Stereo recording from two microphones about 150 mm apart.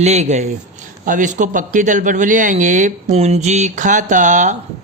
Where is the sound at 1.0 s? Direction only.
60° right (ahead or behind).